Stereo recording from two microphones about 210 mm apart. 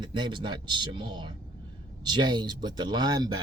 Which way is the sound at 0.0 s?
20° right (ahead or behind).